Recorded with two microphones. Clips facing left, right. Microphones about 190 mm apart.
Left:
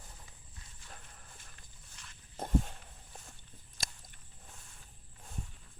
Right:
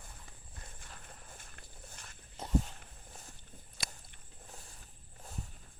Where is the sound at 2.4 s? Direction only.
50° left (ahead or behind).